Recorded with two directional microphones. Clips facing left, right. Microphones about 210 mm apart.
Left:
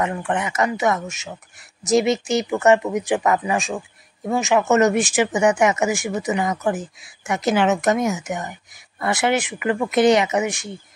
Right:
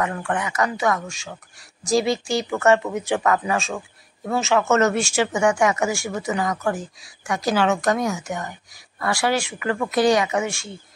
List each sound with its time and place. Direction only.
0.0 s speech: 20° left (ahead or behind)